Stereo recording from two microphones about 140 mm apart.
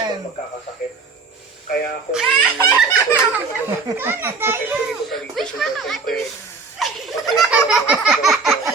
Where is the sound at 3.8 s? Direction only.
15° right (ahead or behind).